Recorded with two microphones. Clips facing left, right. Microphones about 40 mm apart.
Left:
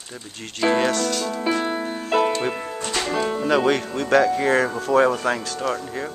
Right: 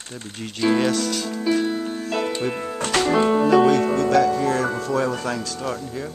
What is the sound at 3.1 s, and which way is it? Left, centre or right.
Speech, centre.